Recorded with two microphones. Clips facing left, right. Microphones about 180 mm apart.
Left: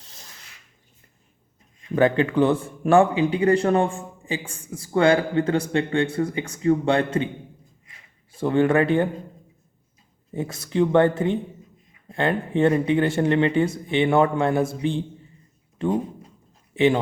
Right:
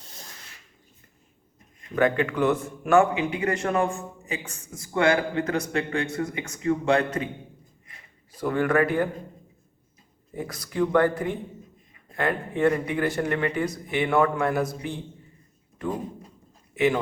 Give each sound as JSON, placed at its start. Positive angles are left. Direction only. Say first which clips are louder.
{"t": 2.0, "sound": "a man's voice", "louder": "left 4 dB", "side_deg": 30}
{"t": 8.3, "sound": "speech", "louder": "left 4 dB", "side_deg": 25}
{"t": 10.3, "sound": "a man's voice", "louder": "left 5 dB", "side_deg": 25}